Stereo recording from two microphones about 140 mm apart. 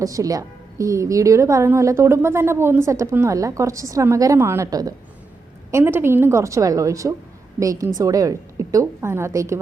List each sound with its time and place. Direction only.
0.0 s a woman's voice: 25° right (ahead or behind)
5.7 s a woman's voice: 15° right (ahead or behind)